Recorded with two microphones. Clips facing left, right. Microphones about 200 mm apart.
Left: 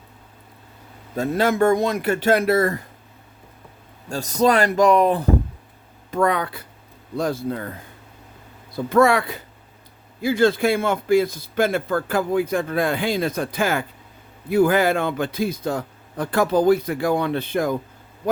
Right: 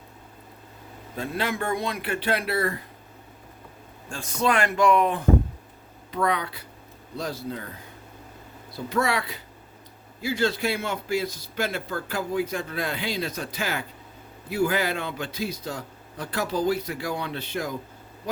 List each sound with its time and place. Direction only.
1.1 s a man's voice: 45° left (ahead or behind)
4.1 s speech: 40° left (ahead or behind)
6.1 s a man's voice: 50° left (ahead or behind)
8.7 s a man's voice: 50° left (ahead or behind)